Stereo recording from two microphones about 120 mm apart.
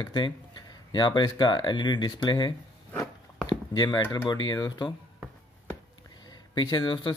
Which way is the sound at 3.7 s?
35° left (ahead or behind).